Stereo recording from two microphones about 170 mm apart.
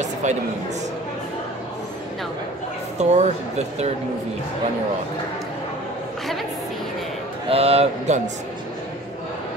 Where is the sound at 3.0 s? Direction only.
40° right (ahead or behind).